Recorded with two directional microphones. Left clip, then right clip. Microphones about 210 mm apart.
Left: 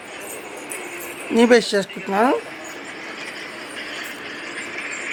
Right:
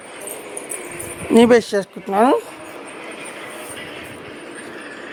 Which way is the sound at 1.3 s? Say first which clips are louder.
Right 2 dB; 20° right (ahead or behind).